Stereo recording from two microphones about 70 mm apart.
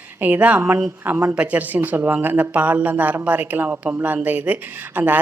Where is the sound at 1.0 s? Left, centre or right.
Right.